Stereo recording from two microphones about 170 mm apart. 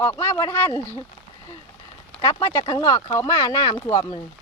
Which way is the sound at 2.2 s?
20° left (ahead or behind).